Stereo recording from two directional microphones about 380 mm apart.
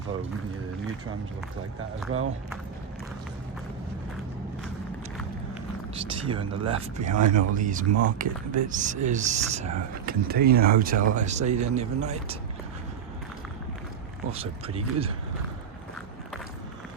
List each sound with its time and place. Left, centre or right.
6.1 s speech: centre
14.3 s speech: centre